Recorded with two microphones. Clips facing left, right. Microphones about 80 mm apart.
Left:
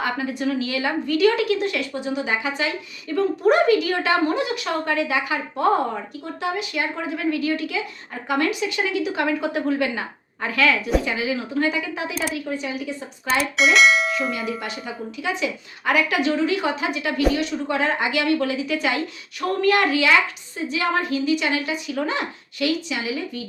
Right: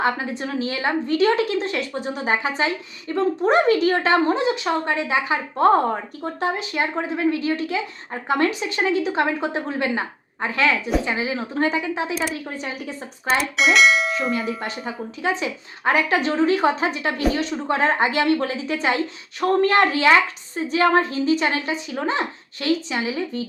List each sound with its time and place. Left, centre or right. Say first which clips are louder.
0.0 s a woman's voice: right 1 dB; right
12.3 s a woman's voice: left 2 dB; right
13.4 s speech: left 1 dB; centre
14.6 s a woman's voice: right 2 dB; right